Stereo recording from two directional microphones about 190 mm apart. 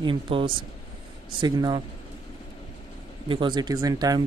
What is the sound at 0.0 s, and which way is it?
Speech, 25° right (ahead or behind).